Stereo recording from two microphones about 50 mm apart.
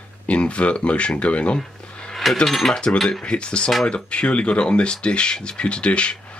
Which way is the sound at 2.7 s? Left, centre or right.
Left.